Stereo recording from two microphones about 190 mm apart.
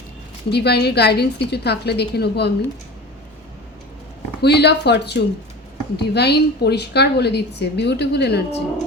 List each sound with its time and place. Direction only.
0.5 s a woman's voice: 60° left (ahead or behind)
4.4 s a woman's voice: 60° left (ahead or behind)